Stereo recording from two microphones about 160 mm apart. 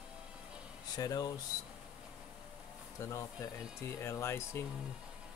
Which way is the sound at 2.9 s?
20° left (ahead or behind).